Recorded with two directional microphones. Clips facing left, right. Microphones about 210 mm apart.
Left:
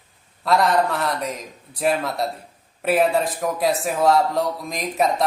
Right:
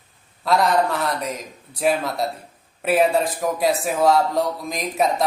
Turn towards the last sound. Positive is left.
turn(degrees=0)  # may be behind; listen again after turning